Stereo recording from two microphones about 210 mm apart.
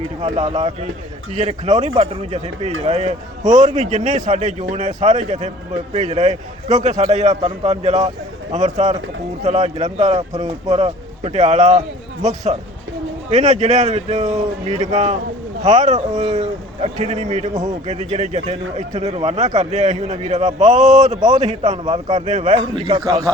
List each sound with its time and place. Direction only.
0.2 s a man's voice: 30° right (ahead or behind)
22.7 s speech: 20° right (ahead or behind)